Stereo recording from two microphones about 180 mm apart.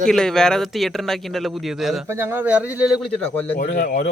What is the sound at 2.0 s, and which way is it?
Speech, 10° right (ahead or behind).